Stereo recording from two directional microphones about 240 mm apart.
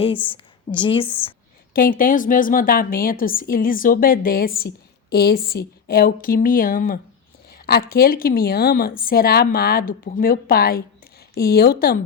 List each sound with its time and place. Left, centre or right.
0.0 s a woman's voice: left
1.7 s a woman's voice: left